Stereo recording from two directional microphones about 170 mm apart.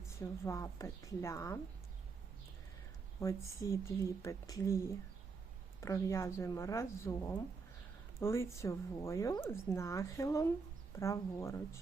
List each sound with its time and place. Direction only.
0.4 s speech: 20° left (ahead or behind)
3.2 s speech: 15° left (ahead or behind)